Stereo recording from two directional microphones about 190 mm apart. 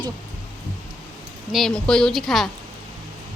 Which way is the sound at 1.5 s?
5° left (ahead or behind).